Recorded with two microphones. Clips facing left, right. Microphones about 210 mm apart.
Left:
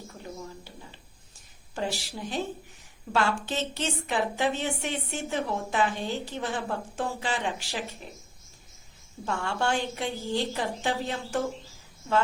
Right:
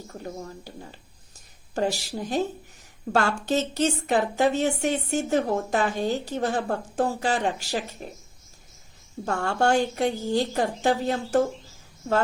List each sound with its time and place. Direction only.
0.1 s a woman's voice: 45° right (ahead or behind)
9.2 s a woman's voice: 45° right (ahead or behind)